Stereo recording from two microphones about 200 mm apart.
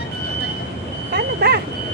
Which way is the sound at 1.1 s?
55° right (ahead or behind).